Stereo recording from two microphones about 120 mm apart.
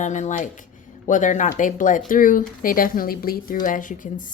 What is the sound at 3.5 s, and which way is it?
Speech, 90° left.